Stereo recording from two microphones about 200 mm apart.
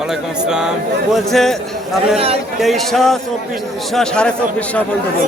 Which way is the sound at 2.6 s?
Centre (ahead or behind).